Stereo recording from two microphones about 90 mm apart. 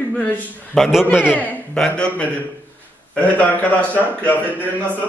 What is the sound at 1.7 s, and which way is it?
A man's voice, 10° left (ahead or behind).